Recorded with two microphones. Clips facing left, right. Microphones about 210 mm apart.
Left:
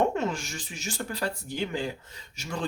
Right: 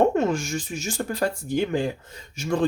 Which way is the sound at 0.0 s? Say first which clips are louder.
Right 6 dB; 45° right (ahead or behind).